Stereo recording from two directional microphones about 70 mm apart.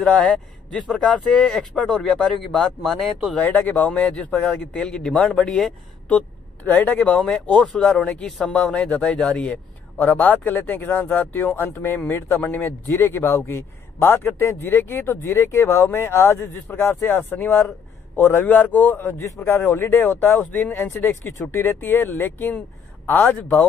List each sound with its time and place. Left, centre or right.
0.0 s speech: centre
3.3 s a man's voice: left; by 5.8 s centre
6.0 s speech: left
7.2 s a man's voice: centre; by 23.4 s left